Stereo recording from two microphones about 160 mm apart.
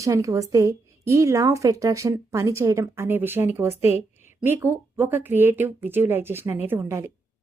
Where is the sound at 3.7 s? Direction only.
40° left (ahead or behind).